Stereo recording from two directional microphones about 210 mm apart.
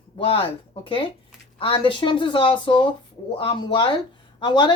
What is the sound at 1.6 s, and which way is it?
Speech, 25° left (ahead or behind).